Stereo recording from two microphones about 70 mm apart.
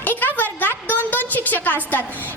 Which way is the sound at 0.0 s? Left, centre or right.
Left.